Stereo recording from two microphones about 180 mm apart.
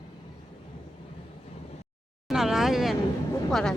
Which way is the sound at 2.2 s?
Centre (ahead or behind).